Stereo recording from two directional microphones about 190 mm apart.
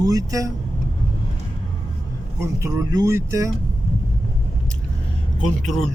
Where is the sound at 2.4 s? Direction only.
15° right (ahead or behind).